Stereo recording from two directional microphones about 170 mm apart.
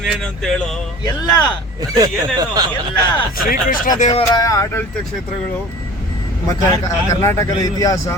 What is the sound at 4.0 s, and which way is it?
Speech, 35° left (ahead or behind).